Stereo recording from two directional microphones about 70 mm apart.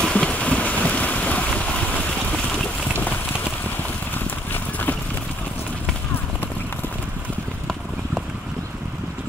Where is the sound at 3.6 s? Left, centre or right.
Left.